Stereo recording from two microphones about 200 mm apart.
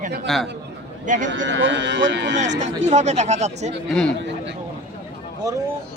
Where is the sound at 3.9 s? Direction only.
5° left (ahead or behind).